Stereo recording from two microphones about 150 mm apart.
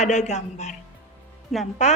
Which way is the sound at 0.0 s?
50° left (ahead or behind).